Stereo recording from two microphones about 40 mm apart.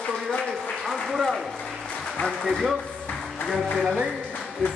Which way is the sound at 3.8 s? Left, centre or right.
Centre.